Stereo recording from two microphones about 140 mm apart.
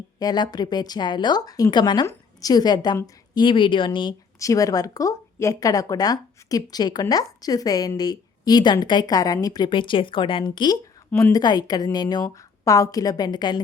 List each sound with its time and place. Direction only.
0.2 s a woman's voice: 30° left (ahead or behind)
4.4 s speech: 25° left (ahead or behind)